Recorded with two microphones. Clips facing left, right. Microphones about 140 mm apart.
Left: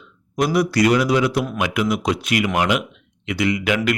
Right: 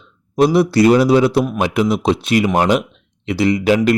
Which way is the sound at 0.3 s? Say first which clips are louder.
Right 6 dB; 30° right (ahead or behind).